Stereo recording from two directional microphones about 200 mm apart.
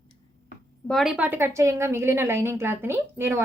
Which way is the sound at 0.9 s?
Centre (ahead or behind).